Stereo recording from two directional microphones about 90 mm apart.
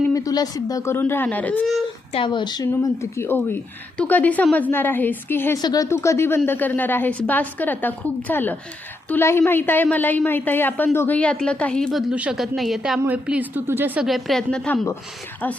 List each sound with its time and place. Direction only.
0.1 s a woman's voice: 40° left (ahead or behind)
0.9 s a woman's voice: 25° left (ahead or behind)
2.1 s a woman's voice: 60° left (ahead or behind)
3.0 s a woman's voice: 25° left (ahead or behind)
5.5 s speech: 45° left (ahead or behind)
5.9 s a woman's voice: 30° left (ahead or behind); by 12.0 s 5° left (ahead or behind)
12.1 s speech: 15° right (ahead or behind)
12.4 s a woman's voice: centre (ahead or behind)
13.1 s a woman's voice: 15° right (ahead or behind)
14.0 s a woman's voice: centre (ahead or behind)